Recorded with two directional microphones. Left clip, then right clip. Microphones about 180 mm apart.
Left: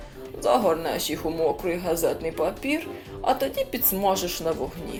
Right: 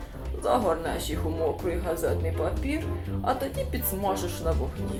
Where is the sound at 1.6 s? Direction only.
50° left (ahead or behind).